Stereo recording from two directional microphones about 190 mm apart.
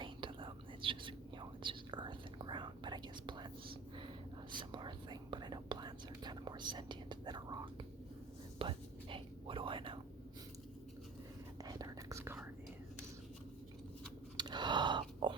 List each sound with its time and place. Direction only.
0.0 s whispering: 25° right (ahead or behind)
4.5 s whispering: 25° right (ahead or behind)
11.6 s whispering: 20° right (ahead or behind)
14.3 s a sound: 25° right (ahead or behind)